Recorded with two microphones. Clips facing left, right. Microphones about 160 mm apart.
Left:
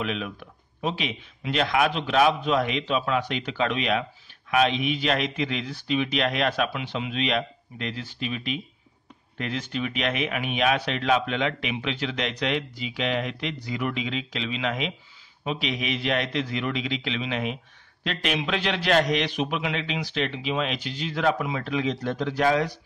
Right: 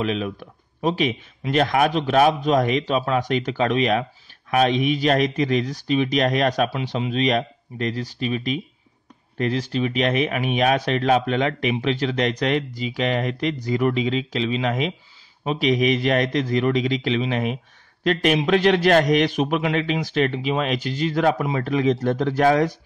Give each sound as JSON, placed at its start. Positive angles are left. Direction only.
{"t": 0.0, "sound": "a man's voice", "side_deg": -40}